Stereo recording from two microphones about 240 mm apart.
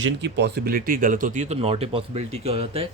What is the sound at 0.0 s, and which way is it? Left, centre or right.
Speech, right.